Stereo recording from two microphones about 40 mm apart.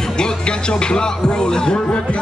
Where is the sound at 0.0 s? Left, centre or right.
Centre.